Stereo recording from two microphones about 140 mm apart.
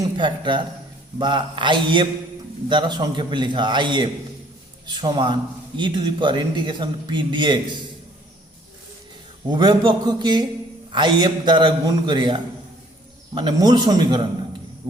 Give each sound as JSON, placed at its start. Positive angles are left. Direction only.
{"t": 0.0, "sound": "a man's voice", "side_deg": -35}
{"t": 9.5, "sound": "a man's voice", "side_deg": -30}